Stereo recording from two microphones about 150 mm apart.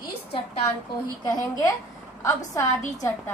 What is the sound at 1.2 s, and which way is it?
A woman's voice, 25° left (ahead or behind).